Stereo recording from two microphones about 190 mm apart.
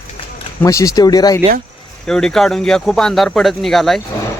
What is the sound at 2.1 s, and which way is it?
Speech, 5° left (ahead or behind).